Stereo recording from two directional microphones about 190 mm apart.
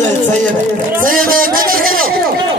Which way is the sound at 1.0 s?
50° right (ahead or behind).